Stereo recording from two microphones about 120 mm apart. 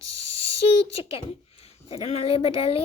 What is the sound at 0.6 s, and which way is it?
A child's voice, 50° left (ahead or behind).